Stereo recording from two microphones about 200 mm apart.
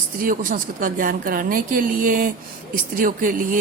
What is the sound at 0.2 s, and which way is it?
A woman's voice, 45° right (ahead or behind).